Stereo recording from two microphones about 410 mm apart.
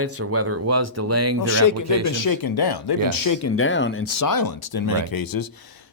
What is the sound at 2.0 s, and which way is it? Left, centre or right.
Speech, left.